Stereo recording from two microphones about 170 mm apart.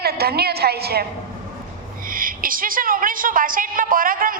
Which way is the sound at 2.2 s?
55° right (ahead or behind).